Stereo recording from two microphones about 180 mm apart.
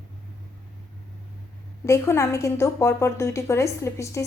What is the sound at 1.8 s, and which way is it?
A woman's voice, 15° left (ahead or behind).